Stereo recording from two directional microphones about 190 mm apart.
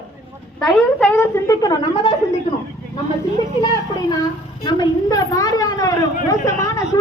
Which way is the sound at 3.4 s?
20° left (ahead or behind).